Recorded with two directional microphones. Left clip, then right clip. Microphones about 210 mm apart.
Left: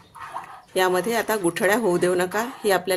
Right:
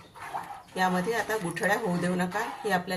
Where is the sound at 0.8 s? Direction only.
55° left (ahead or behind).